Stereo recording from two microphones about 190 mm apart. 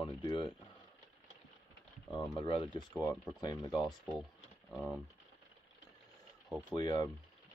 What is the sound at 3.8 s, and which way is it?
Speech, centre (ahead or behind).